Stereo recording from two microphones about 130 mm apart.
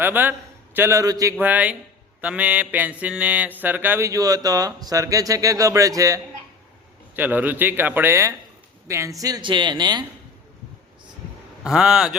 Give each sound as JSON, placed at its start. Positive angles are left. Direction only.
{"t": 0.0, "sound": "a man's voice", "side_deg": -15}
{"t": 1.4, "sound": "mantra", "side_deg": -10}
{"t": 4.4, "sound": "speech", "side_deg": -25}
{"t": 7.2, "sound": "mantra", "side_deg": -15}
{"t": 8.9, "sound": "a woman's voice", "side_deg": -25}
{"t": 11.6, "sound": "speech", "side_deg": -5}